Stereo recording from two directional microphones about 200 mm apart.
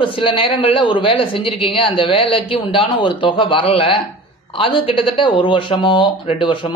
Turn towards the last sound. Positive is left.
turn(degrees=25)  # may be behind; listen again after turning